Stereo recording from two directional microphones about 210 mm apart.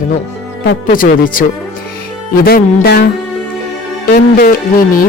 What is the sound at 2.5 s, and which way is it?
Speech, 50° left (ahead or behind).